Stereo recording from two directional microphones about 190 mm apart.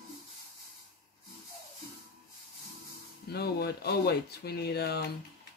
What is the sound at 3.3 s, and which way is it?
Speech, 55° left (ahead or behind).